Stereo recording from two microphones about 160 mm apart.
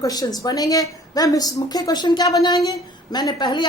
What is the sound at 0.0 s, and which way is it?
A woman's voice, 25° left (ahead or behind).